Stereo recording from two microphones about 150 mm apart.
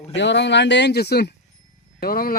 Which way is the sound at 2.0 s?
80° left.